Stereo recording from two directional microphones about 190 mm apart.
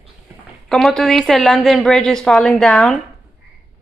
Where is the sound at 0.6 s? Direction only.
Centre (ahead or behind).